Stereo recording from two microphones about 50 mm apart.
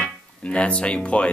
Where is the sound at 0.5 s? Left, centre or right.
Left.